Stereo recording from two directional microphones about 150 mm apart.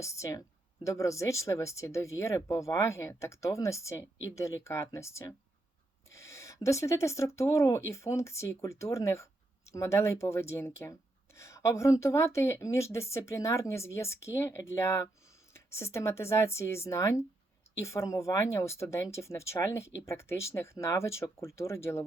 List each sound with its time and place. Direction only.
0.0 s a woman's voice: 20° left (ahead or behind)